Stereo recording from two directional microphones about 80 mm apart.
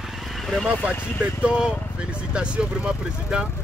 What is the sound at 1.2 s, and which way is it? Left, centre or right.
Speech, centre.